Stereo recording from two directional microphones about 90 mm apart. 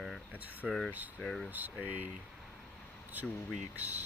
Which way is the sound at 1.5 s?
20° right (ahead or behind).